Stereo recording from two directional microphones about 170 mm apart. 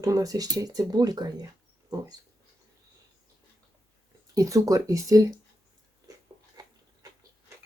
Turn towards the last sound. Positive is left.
turn(degrees=-20)  # may be behind; listen again after turning